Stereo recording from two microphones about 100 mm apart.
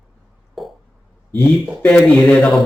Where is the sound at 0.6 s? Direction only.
Centre (ahead or behind).